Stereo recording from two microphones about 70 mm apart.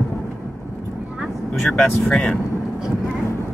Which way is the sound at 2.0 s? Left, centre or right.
Centre.